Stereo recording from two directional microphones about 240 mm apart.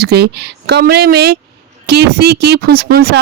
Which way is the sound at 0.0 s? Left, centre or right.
Right.